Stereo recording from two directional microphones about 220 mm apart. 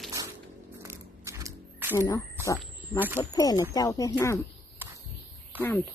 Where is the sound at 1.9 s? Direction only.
15° left (ahead or behind).